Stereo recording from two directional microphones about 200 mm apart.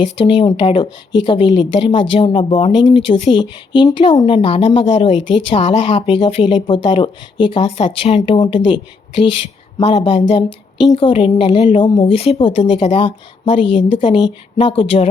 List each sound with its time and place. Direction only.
0.2 s speech: 25° left (ahead or behind)